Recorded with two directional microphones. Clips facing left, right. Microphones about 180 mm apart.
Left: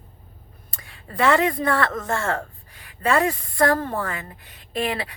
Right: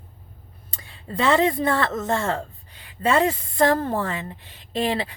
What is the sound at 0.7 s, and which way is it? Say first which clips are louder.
Speech: right 4 dB; 25° right (ahead or behind).